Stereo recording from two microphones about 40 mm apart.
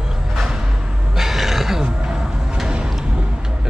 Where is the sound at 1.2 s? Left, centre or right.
Centre.